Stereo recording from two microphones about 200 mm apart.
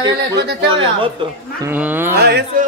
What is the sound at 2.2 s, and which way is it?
Music, 55° right (ahead or behind).